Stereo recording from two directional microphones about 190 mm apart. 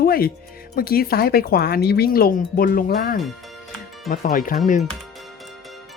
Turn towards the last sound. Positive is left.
turn(degrees=40)  # may be behind; listen again after turning